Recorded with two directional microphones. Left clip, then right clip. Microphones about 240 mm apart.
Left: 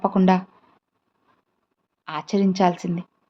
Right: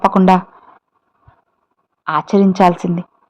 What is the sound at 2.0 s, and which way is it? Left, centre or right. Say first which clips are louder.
Speech: right 10 dB; centre.